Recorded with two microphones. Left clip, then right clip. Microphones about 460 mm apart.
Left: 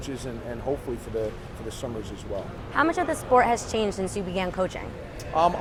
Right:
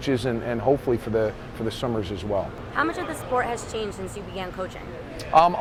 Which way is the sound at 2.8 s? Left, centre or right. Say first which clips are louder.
Left 2 dB; left.